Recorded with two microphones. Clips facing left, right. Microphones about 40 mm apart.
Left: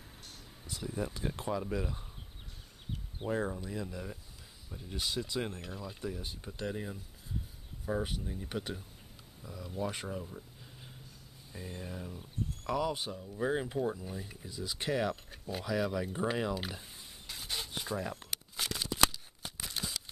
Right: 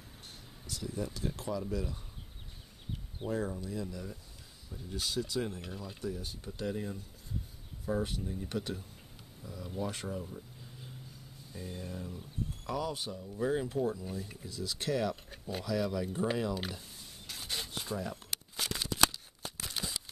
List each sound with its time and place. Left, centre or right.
0.7 s speech: left
3.3 s speech: left
5.5 s speech: centre
5.9 s speech: centre
9.4 s speech: centre
10.2 s a sound: centre
11.5 s speech: centre
15.2 s a sound: centre
15.6 s speech: centre
17.3 s rub: centre
18.1 s a sound: centre
18.9 s shuffling cards: centre